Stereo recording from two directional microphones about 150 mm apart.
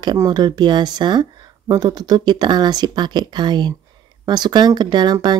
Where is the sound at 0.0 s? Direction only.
30° right (ahead or behind).